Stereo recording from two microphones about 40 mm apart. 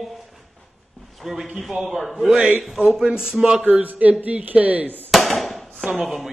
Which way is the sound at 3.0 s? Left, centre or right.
Centre.